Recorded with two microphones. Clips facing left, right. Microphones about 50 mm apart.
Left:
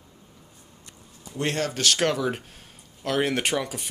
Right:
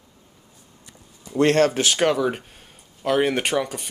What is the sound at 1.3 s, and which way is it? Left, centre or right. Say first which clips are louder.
Speech: right 10 dB; right.